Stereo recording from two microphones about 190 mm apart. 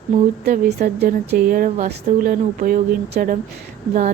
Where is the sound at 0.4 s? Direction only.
55° right (ahead or behind).